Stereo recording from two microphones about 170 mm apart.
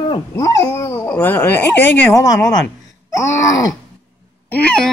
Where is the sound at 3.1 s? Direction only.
20° left (ahead or behind).